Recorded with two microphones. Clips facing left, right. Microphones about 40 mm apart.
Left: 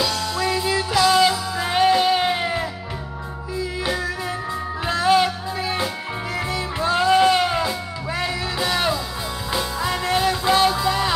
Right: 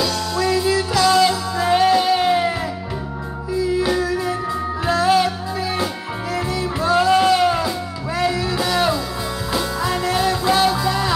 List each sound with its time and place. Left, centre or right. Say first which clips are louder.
0.4 s music: right 4 dB; centre
4.8 s music: right 1 dB; left
6.5 s music: right 4 dB; left